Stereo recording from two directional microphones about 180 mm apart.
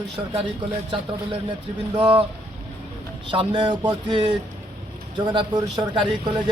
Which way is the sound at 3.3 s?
25° right (ahead or behind).